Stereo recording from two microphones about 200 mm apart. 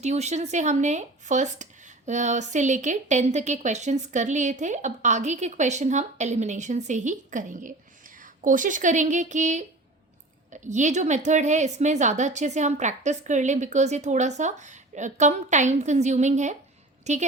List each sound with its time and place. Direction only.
0.0 s a woman's voice: 35° right (ahead or behind)